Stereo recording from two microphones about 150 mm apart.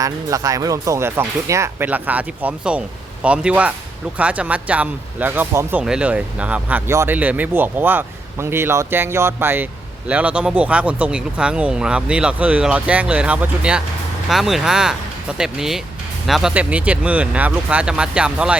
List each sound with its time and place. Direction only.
0.0 s speech: 20° right (ahead or behind); by 18.5 s 5° right (ahead or behind)